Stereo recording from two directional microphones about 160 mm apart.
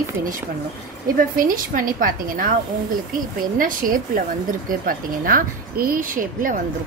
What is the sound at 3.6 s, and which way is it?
A woman's voice, 60° right (ahead or behind).